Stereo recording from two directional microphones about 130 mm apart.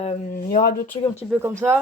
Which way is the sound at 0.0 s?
50° left (ahead or behind).